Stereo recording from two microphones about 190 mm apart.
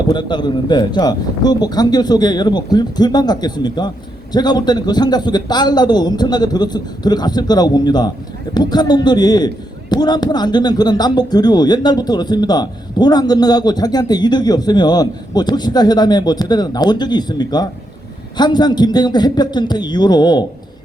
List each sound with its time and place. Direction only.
0.1 s a man's voice: 25° left (ahead or behind)